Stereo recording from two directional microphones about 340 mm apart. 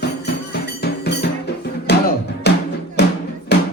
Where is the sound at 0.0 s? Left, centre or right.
Left.